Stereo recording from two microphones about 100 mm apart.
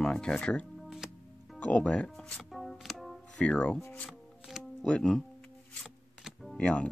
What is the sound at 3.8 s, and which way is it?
Speech, 20° left (ahead or behind).